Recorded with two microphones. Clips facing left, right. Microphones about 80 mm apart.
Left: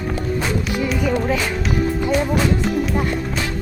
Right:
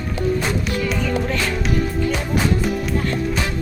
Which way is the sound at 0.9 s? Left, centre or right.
Centre.